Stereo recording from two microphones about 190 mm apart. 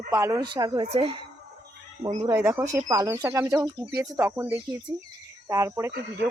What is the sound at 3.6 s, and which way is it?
Speech, 25° right (ahead or behind).